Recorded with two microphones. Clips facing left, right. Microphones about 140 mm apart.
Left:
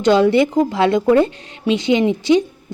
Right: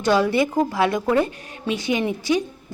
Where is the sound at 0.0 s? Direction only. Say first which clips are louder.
Left 6 dB; 25° left (ahead or behind).